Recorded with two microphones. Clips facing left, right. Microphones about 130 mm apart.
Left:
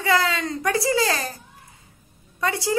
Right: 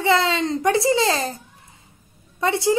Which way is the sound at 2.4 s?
25° right (ahead or behind).